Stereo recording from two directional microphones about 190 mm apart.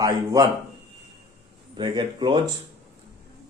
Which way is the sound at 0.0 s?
20° right (ahead or behind).